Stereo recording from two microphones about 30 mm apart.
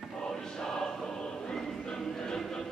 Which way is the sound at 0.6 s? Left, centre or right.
Centre.